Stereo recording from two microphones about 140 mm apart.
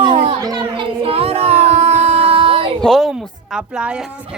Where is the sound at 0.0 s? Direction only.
40° right (ahead or behind).